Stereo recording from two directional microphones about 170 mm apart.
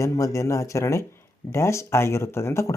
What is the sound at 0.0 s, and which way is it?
Speech, 15° left (ahead or behind).